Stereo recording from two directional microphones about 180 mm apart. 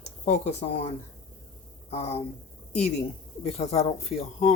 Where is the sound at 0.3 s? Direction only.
40° left (ahead or behind).